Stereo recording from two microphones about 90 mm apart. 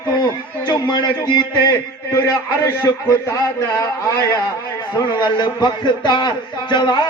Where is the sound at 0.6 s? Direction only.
50° left (ahead or behind).